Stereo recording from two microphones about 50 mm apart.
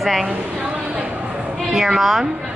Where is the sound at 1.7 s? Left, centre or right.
Centre.